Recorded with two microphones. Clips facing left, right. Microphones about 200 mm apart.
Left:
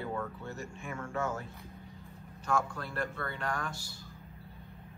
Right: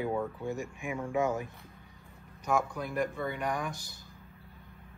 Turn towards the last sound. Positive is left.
turn(degrees=-15)  # may be behind; listen again after turning